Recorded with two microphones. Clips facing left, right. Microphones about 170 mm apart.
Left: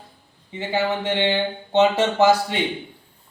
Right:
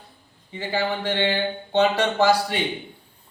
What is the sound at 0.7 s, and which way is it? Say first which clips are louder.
A man's voice: left 2 dB; 20° left (ahead or behind).